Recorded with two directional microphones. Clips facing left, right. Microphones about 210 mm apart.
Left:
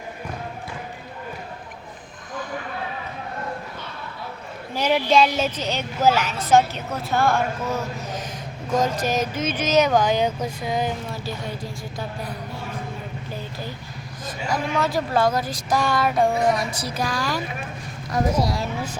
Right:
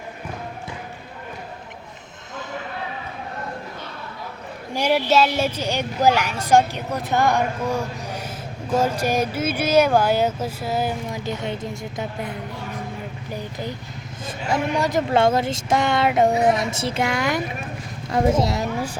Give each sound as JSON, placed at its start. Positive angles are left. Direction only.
{"t": 4.7, "sound": "a woman's voice", "side_deg": -10}
{"t": 11.3, "sound": "speech", "side_deg": -20}